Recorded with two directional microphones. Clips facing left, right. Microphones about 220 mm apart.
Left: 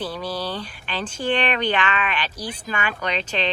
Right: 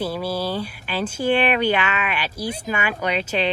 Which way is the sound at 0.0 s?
10° right (ahead or behind).